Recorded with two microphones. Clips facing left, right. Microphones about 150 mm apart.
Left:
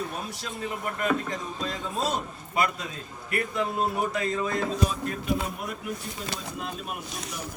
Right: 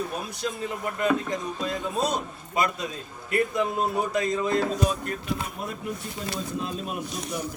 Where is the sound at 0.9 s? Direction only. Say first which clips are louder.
Right 3 dB; 20° right (ahead or behind).